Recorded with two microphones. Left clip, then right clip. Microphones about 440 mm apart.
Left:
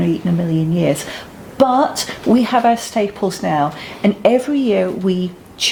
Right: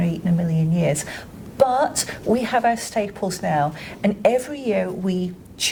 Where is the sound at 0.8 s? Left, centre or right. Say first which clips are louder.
Left 2 dB; right.